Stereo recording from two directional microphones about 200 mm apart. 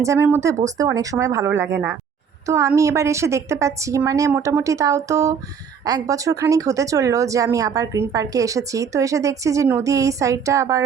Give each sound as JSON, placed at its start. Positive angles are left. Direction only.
{"t": 0.0, "sound": "speech", "side_deg": -15}